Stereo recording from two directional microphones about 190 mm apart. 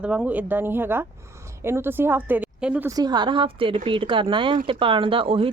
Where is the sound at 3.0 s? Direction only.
20° right (ahead or behind).